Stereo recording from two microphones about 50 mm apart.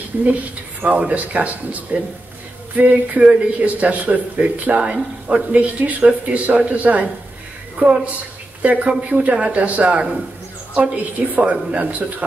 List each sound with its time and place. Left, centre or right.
0.1 s a woman's voice: right